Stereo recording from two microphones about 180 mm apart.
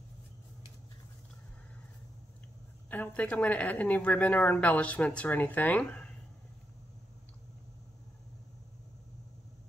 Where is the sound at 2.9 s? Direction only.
10° left (ahead or behind).